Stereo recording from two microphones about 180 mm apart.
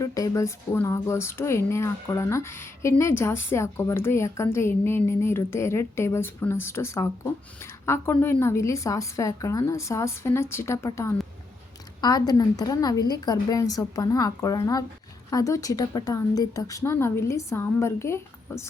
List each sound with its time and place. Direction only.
0.0 s a woman's voice: 20° left (ahead or behind)